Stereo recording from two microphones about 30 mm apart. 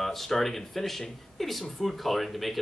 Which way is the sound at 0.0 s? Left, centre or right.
Centre.